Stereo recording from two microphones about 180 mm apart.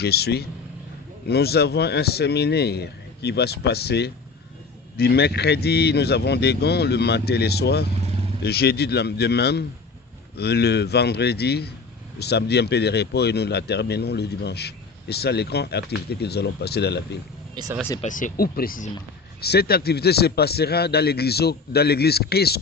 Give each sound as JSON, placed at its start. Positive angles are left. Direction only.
{"t": 0.0, "sound": "speech", "side_deg": 65}
{"t": 17.5, "sound": "speech", "side_deg": -20}
{"t": 18.0, "sound": "speech", "side_deg": 45}